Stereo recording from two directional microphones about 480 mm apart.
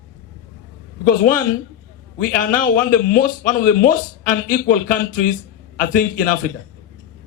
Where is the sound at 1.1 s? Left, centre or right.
Centre.